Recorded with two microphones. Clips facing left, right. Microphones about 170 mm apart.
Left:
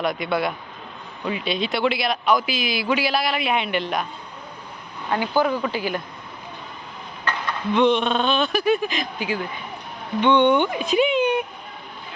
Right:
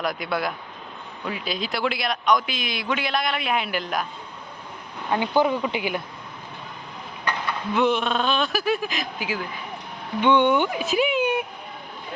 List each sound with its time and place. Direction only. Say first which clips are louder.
0.0 s a man's voice: left 3 dB; centre (ahead or behind)
5.1 s speech: even; 20° right (ahead or behind)
7.3 s a man's voice: left 2 dB; 5° right (ahead or behind)